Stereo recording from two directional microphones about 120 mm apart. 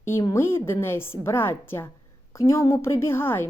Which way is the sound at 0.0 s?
25° left (ahead or behind).